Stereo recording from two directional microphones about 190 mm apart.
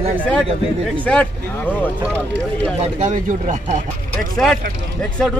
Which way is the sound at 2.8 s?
40° right (ahead or behind).